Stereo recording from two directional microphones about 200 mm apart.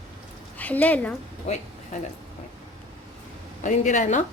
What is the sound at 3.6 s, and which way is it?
Speech, 35° left (ahead or behind).